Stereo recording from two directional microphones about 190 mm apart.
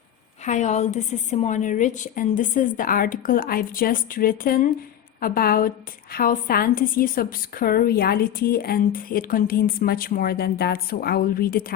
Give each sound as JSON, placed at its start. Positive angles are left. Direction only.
{"t": 0.4, "sound": "a woman's voice", "side_deg": 40}